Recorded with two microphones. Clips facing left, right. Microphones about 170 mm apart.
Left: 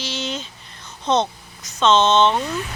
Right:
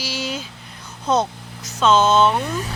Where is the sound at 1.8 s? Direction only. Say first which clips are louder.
Even; 10° right (ahead or behind).